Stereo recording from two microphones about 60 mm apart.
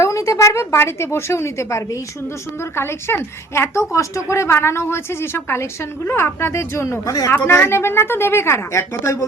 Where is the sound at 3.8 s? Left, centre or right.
Left.